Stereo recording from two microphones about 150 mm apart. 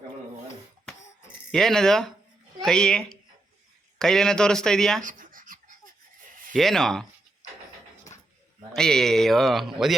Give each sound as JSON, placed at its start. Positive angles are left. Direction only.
{"t": 1.5, "sound": "speech", "side_deg": 0}
{"t": 5.0, "sound": "a sound", "side_deg": -60}
{"t": 6.5, "sound": "speech", "side_deg": 0}
{"t": 8.7, "sound": "speech", "side_deg": 5}